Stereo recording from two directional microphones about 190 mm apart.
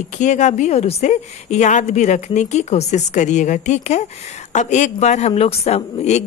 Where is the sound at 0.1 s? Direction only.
40° left (ahead or behind).